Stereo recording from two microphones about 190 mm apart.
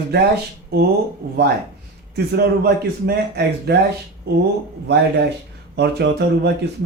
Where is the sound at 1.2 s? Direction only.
50° right (ahead or behind).